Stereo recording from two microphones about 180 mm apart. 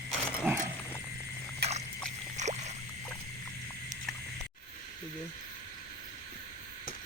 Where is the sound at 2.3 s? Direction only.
40° right (ahead or behind).